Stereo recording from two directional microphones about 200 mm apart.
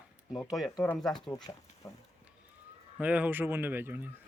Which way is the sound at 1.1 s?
20° left (ahead or behind).